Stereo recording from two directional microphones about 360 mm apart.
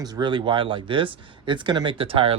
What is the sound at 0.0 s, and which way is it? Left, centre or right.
Speech, centre.